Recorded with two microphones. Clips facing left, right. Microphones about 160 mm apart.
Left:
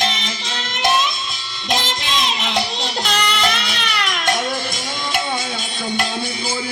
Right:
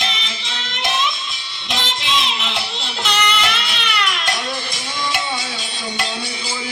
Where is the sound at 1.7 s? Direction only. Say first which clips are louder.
Left 1 dB; 40° left (ahead or behind).